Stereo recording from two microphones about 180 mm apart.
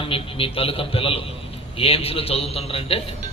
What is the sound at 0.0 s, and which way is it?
A man's voice, 30° left (ahead or behind).